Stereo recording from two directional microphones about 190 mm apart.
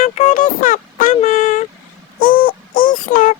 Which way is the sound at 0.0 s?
45° left (ahead or behind).